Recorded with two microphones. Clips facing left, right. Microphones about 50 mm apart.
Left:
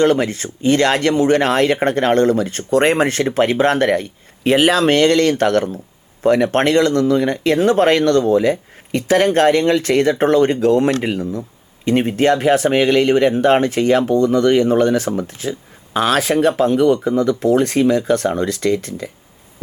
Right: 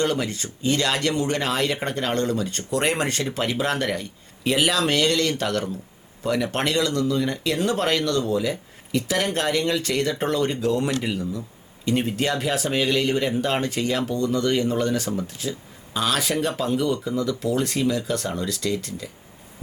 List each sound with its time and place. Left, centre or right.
0.0 s speech: left